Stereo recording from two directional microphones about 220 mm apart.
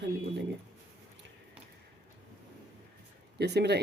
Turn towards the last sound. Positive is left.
turn(degrees=-50)  # may be behind; listen again after turning